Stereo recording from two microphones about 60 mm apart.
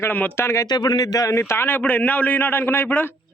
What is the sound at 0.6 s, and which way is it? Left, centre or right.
Speech, left.